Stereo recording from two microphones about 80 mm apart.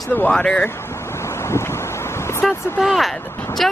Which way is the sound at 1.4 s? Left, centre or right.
Left.